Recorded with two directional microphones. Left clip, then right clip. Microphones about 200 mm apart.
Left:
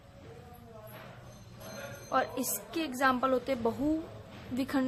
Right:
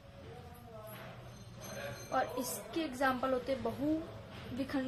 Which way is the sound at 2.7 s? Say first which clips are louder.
Left 5 dB; 30° left (ahead or behind).